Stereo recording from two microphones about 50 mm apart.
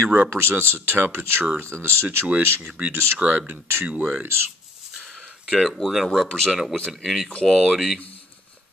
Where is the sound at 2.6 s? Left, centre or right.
Right.